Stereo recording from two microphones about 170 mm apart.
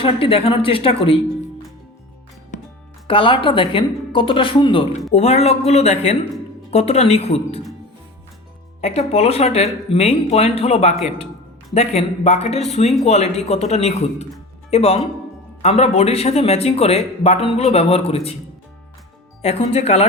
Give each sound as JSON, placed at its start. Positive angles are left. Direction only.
{"t": 0.0, "sound": "a woman's voice", "side_deg": 35}
{"t": 3.1, "sound": "a woman's voice", "side_deg": 30}
{"t": 8.8, "sound": "a woman's voice", "side_deg": 40}
{"t": 19.4, "sound": "a woman's voice", "side_deg": 40}